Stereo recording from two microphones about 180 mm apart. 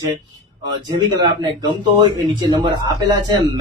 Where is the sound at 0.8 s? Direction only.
25° right (ahead or behind).